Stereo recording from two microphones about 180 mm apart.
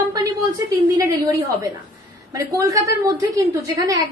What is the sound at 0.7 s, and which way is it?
A woman's voice, 20° right (ahead or behind).